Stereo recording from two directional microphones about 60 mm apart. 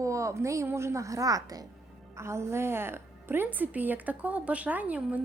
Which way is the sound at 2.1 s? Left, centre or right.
Right.